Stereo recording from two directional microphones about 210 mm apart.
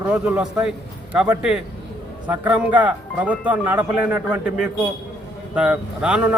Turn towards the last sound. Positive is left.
turn(degrees=-5)  # may be behind; listen again after turning